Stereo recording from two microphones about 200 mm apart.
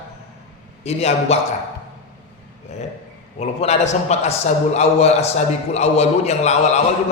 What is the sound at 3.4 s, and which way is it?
A man's voice, 35° left (ahead or behind).